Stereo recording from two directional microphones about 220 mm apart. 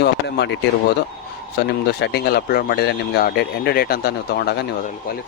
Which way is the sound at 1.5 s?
50° left (ahead or behind).